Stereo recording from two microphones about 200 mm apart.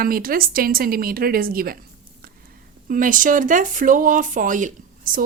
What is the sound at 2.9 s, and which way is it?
Speech, 40° right (ahead or behind).